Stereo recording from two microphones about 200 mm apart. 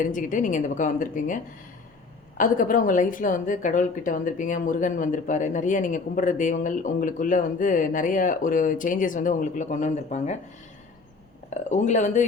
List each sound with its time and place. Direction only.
0.0 s a woman's voice: 40° left (ahead or behind)
2.4 s a woman's voice: 40° left (ahead or behind)
11.5 s a woman's voice: 35° left (ahead or behind)